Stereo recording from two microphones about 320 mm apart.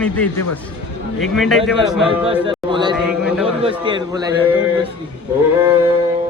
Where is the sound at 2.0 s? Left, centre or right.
Centre.